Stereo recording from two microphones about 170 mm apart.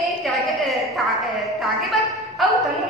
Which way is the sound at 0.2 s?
Centre (ahead or behind).